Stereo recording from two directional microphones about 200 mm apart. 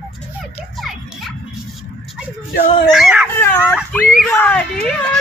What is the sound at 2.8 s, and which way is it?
Speech, centre (ahead or behind).